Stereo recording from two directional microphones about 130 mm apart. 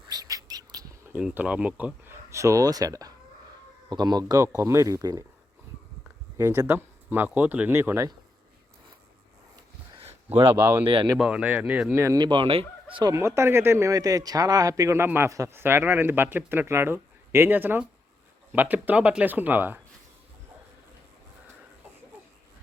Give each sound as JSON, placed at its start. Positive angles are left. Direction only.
{"t": 0.1, "sound": "a sound", "side_deg": -30}
{"t": 1.1, "sound": "speech", "side_deg": -10}
{"t": 2.3, "sound": "speech", "side_deg": -25}
{"t": 6.3, "sound": "speech", "side_deg": -20}
{"t": 10.5, "sound": "speech", "side_deg": -15}
{"t": 10.8, "sound": "speech", "side_deg": -40}
{"t": 11.2, "sound": "speech", "side_deg": -10}
{"t": 12.2, "sound": "fowl", "side_deg": -40}
{"t": 13.1, "sound": "speech", "side_deg": -20}